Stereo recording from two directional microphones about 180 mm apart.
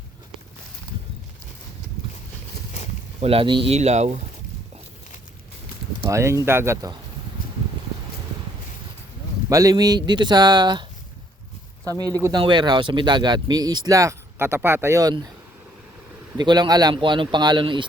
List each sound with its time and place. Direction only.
3.2 s speech: 30° right (ahead or behind)
6.1 s speech: 15° right (ahead or behind)
9.5 s speech: 20° right (ahead or behind)
11.9 s speech: 20° right (ahead or behind)
16.4 s speech: 25° right (ahead or behind)